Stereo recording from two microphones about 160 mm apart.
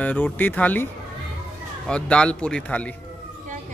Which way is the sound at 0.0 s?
10° left (ahead or behind).